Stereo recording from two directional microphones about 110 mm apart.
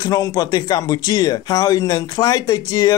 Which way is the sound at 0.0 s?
35° left (ahead or behind).